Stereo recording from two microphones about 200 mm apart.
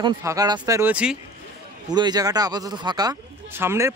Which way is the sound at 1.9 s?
20° right (ahead or behind).